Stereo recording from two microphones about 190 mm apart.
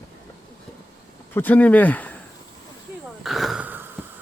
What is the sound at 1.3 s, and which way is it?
Speech, 10° left (ahead or behind).